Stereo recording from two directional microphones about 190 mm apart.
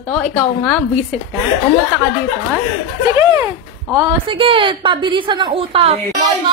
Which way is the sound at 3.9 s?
20° right (ahead or behind).